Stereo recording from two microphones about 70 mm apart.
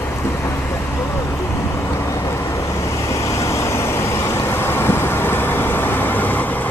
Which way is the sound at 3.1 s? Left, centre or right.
Left.